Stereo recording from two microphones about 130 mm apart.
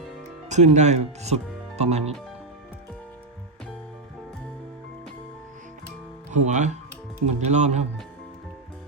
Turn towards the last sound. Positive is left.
turn(degrees=-60)  # may be behind; listen again after turning